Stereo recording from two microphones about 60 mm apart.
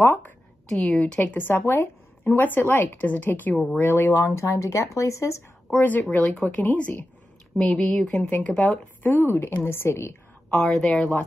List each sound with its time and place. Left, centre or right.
0.0 s a woman's voice: left
0.7 s a woman's voice: centre
1.2 s speech: left
1.5 s a woman's voice: left
4.1 s a woman's voice: left
4.6 s speech: left
5.7 s a woman's voice: left
7.5 s a woman's voice: centre
9.0 s a woman's voice: left
10.5 s speech: centre